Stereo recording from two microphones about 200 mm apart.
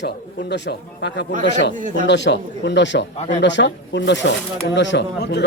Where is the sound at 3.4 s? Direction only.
65° left (ahead or behind).